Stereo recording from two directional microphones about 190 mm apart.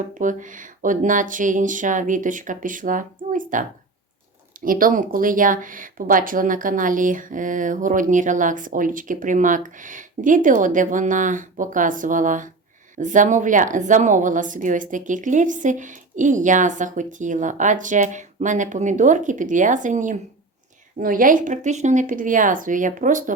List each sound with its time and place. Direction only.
0.1 s speech: 45° right (ahead or behind)